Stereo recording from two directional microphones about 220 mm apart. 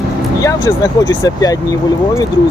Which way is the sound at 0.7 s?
15° left (ahead or behind).